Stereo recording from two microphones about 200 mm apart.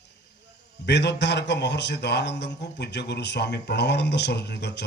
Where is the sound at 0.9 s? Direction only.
60° left (ahead or behind).